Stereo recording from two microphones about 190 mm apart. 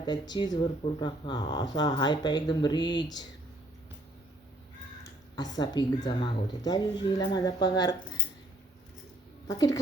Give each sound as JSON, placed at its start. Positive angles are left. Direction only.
{"t": 0.0, "sound": "speech", "side_deg": 25}
{"t": 5.4, "sound": "speech", "side_deg": 20}
{"t": 9.5, "sound": "speech", "side_deg": 20}